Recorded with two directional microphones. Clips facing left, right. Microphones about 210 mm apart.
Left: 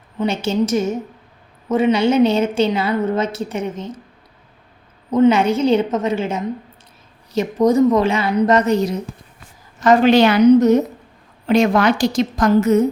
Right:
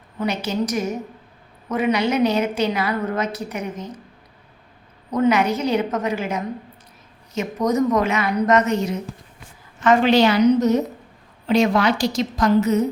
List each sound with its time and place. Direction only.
0.2 s a woman's voice: 25° left (ahead or behind)
5.1 s a woman's voice: 25° left (ahead or behind); by 12.8 s 50° left (ahead or behind)